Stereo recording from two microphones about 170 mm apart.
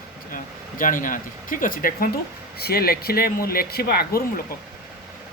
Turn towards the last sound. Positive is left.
turn(degrees=65)  # may be behind; listen again after turning